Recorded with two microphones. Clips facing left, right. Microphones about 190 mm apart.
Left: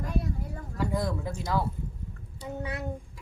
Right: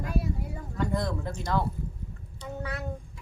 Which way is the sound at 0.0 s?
5° right (ahead or behind).